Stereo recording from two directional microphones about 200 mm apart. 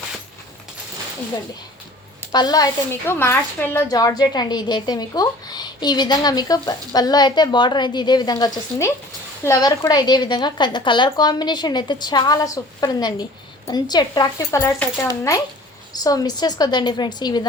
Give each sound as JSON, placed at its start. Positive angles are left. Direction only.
{"t": 2.3, "sound": "a woman's voice", "side_deg": 20}